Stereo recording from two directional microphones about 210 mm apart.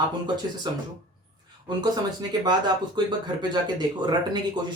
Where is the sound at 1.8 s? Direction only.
20° right (ahead or behind).